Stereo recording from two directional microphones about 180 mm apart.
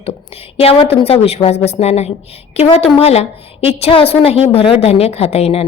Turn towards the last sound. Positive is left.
turn(degrees=35)  # may be behind; listen again after turning